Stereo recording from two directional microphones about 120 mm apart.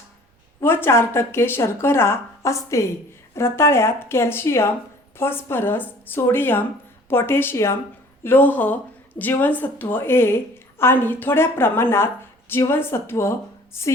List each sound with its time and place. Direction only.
0.6 s speech: 20° left (ahead or behind)